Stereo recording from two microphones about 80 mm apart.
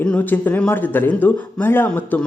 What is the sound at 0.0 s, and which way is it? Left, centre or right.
Speech, centre.